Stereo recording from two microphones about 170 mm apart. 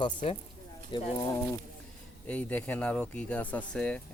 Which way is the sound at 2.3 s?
10° left (ahead or behind).